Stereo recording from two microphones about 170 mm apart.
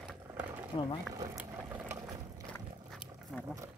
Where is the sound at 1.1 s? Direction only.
20° right (ahead or behind).